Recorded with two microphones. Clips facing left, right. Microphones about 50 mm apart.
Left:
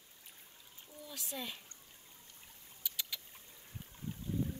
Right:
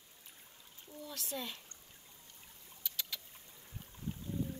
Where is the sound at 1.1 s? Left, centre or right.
Centre.